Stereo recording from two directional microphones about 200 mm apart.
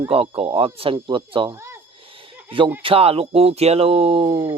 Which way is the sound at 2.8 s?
30° right (ahead or behind).